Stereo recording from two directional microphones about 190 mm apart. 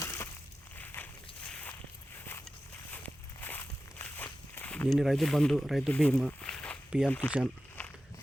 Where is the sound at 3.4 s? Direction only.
10° left (ahead or behind).